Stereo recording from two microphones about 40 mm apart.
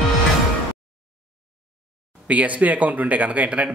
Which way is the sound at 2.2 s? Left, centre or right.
Right.